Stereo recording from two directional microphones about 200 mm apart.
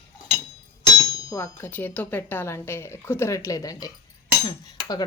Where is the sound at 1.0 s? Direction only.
20° left (ahead or behind).